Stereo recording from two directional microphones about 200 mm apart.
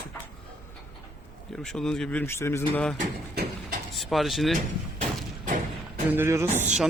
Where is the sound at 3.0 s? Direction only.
45° right (ahead or behind).